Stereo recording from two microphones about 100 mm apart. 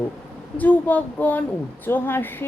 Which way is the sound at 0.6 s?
15° left (ahead or behind).